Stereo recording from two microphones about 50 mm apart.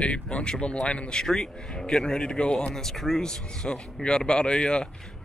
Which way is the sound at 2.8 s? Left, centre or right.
Centre.